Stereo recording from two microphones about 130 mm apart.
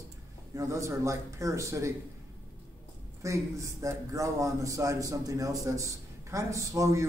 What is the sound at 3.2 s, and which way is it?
A man's voice, 25° right (ahead or behind).